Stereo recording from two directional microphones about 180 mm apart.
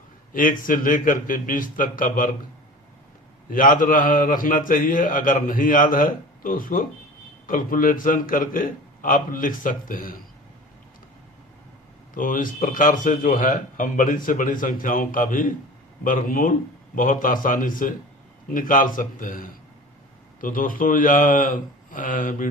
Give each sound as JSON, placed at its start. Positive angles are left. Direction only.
{"t": 0.3, "sound": "speech", "side_deg": 50}
{"t": 3.5, "sound": "speech", "side_deg": 50}
{"t": 12.1, "sound": "speech", "side_deg": 50}